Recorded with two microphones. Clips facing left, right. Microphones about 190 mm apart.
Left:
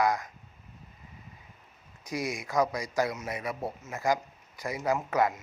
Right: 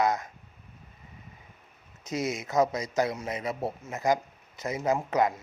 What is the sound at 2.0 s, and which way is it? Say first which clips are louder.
A man's voice: right 3 dB; 20° right (ahead or behind).